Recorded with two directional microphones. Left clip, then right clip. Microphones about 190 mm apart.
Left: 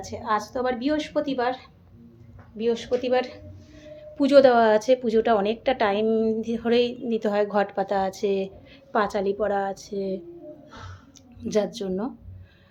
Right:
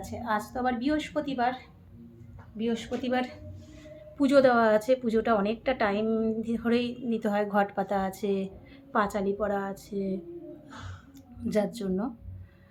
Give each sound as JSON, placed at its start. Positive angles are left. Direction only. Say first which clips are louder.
{"t": 0.0, "sound": "a woman's voice", "louder": "left 5 dB", "side_deg": -10}
{"t": 2.6, "sound": "a woman's voice", "louder": "left 8 dB", "side_deg": -15}
{"t": 11.3, "sound": "a woman's voice", "louder": "left 4 dB", "side_deg": -10}